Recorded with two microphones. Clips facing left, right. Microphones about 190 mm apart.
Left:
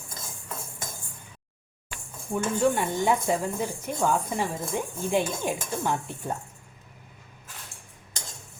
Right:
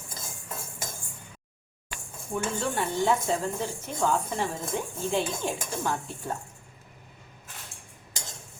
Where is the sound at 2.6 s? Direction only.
15° left (ahead or behind).